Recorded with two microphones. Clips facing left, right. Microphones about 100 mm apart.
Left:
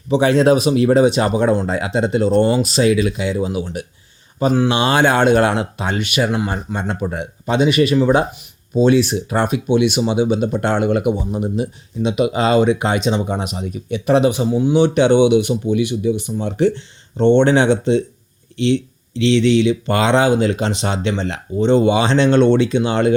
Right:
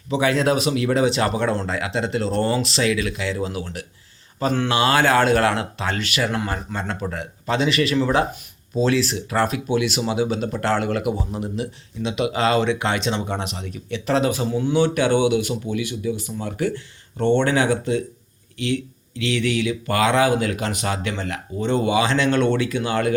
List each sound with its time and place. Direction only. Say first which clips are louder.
0.1 s speech: left 6 dB; 30° left (ahead or behind)